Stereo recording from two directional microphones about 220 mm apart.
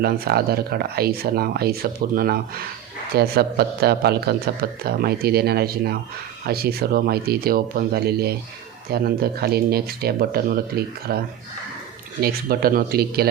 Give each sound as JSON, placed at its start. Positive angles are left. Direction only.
{"t": 0.0, "sound": "speech", "side_deg": -45}
{"t": 12.2, "sound": "speech", "side_deg": -45}